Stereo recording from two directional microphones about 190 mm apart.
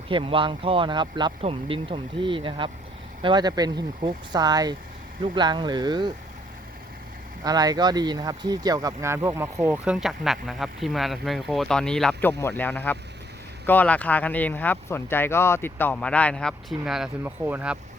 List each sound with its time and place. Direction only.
0.1 s speech: 25° right (ahead or behind)
7.4 s speech: 20° right (ahead or behind)